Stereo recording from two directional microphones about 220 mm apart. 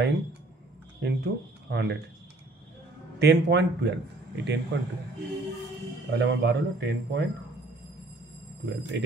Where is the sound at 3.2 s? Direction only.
50° right (ahead or behind).